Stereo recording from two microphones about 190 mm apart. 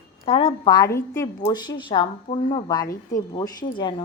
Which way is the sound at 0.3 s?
30° left (ahead or behind).